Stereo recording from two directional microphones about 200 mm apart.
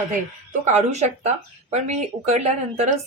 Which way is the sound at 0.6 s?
35° right (ahead or behind).